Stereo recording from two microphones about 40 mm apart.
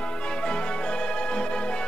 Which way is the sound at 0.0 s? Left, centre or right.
Left.